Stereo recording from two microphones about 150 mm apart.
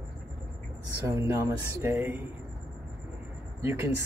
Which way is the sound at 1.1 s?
20° right (ahead or behind).